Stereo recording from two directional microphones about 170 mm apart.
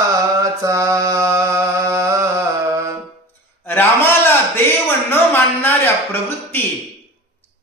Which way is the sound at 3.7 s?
10° left (ahead or behind).